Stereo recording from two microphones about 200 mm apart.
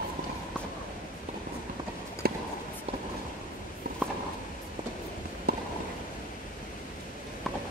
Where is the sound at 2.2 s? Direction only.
50° right (ahead or behind).